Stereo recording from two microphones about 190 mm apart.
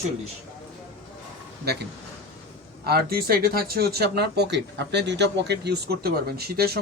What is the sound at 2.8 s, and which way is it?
Speech, 55° right (ahead or behind).